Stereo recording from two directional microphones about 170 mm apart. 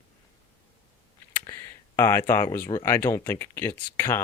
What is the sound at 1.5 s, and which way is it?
Speech, 15° left (ahead or behind).